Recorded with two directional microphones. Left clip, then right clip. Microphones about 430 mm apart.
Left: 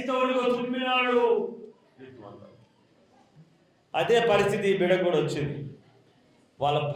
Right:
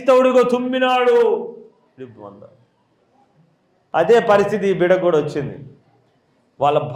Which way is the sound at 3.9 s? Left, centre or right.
Right.